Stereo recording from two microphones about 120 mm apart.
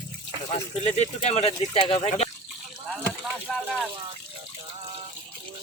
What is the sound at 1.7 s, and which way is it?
Speech, 50° left (ahead or behind).